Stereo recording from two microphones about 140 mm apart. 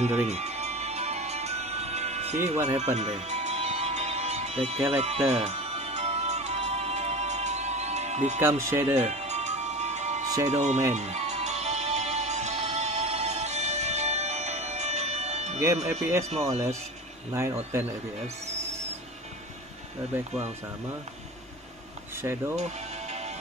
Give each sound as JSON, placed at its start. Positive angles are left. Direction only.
{"t": 0.3, "sound": "music", "side_deg": -50}
{"t": 8.4, "sound": "speech", "side_deg": -20}
{"t": 9.0, "sound": "music", "side_deg": -55}
{"t": 10.2, "sound": "music", "side_deg": -25}
{"t": 10.5, "sound": "speech", "side_deg": -55}
{"t": 10.9, "sound": "music", "side_deg": -55}
{"t": 16.0, "sound": "speech", "side_deg": -20}
{"t": 17.3, "sound": "speech", "side_deg": -20}
{"t": 22.1, "sound": "a sound", "side_deg": -15}
{"t": 22.6, "sound": "music", "side_deg": -55}